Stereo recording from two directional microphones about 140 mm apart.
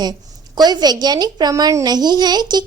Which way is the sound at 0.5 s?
30° right (ahead or behind).